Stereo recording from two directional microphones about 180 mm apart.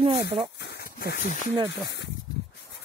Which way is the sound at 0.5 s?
65° left (ahead or behind).